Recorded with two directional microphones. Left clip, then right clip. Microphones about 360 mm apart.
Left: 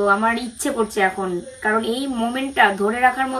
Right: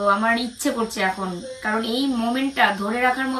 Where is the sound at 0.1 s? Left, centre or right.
Centre.